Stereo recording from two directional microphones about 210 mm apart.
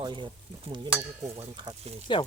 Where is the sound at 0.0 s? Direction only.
20° right (ahead or behind).